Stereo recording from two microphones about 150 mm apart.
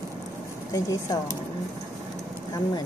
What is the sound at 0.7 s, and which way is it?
Speech, 25° left (ahead or behind).